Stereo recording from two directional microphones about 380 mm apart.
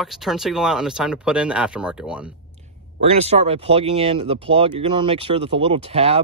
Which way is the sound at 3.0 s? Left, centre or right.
Centre.